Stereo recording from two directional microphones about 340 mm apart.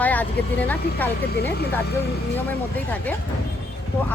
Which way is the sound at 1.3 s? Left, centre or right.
Left.